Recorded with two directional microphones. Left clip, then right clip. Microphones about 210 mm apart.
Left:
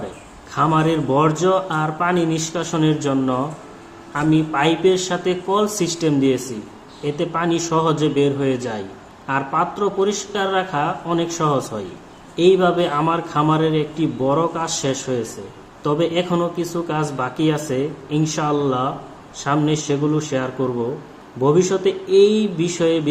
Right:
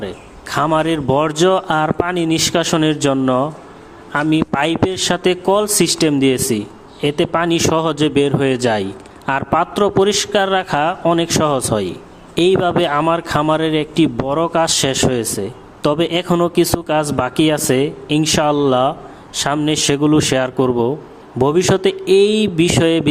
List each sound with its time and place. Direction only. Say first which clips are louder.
0.5 s speech: right 2 dB; 50° right (ahead or behind)